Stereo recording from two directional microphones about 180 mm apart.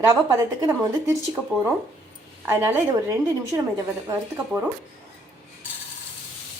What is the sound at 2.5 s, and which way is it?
A woman's voice, 15° right (ahead or behind).